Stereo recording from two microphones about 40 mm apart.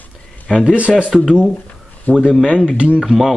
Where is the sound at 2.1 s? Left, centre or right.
Left.